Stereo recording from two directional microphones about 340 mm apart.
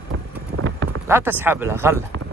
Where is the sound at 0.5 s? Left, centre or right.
Right.